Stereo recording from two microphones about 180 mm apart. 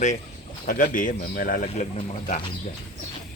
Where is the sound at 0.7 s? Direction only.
45° left (ahead or behind).